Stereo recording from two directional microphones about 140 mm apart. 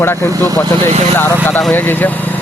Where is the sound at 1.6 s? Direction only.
10° left (ahead or behind).